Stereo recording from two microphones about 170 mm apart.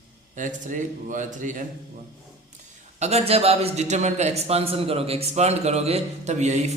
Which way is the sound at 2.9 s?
40° right (ahead or behind).